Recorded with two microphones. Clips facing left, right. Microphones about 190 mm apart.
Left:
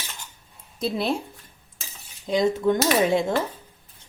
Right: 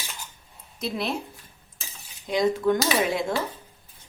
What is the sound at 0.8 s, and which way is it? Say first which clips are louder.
Speech: left 4 dB; 30° left (ahead or behind).